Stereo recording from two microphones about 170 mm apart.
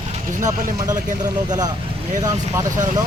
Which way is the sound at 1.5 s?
20° right (ahead or behind).